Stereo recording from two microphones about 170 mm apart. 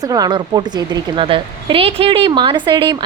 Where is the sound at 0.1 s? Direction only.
25° right (ahead or behind).